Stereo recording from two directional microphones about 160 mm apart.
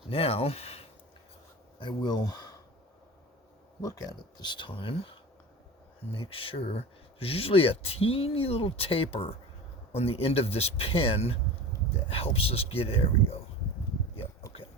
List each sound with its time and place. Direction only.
0.1 s speech: 35° left (ahead or behind)
1.8 s speech: 30° left (ahead or behind)
3.8 s speech: 20° left (ahead or behind)
6.1 s speech: 35° left (ahead or behind)